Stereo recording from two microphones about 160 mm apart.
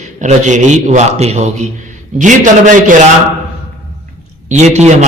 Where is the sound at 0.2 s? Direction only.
50° right (ahead or behind).